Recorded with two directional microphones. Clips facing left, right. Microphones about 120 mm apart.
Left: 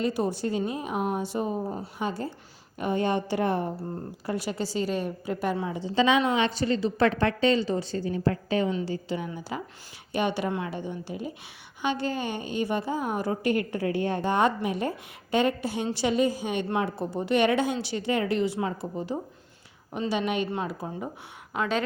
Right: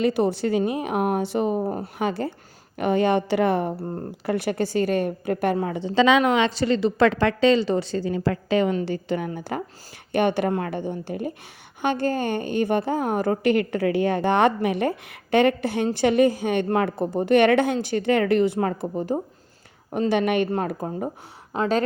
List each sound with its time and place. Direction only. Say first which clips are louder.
0.0 s a woman's voice: right 6 dB; 70° right (ahead or behind); by 8.7 s 85° right
8.7 s a woman's voice: right 5 dB; 60° right (ahead or behind); by 21.8 s 35° right (ahead or behind)